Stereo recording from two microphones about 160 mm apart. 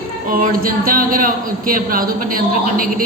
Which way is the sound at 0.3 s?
60° right (ahead or behind).